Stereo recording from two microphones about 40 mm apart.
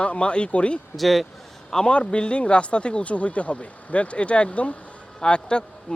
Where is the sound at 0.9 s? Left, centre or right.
Centre.